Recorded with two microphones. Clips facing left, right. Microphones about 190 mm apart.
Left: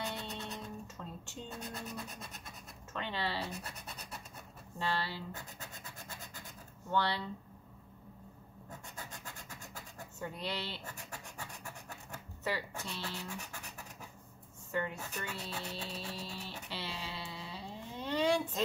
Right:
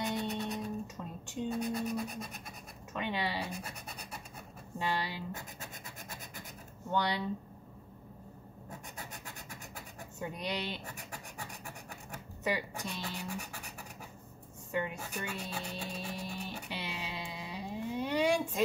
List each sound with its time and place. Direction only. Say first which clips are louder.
0.0 s music: right 6 dB; 15° right (ahead or behind)
2.9 s speech: right 3 dB; 15° right (ahead or behind)
4.7 s speech: right 2 dB; 15° right (ahead or behind)
6.9 s speech: right 1 dB; 15° right (ahead or behind)
10.2 s speech: right 3 dB; 15° right (ahead or behind)
12.4 s speech: right 3 dB; 15° right (ahead or behind)
14.7 s music: right 2 dB; 15° right (ahead or behind)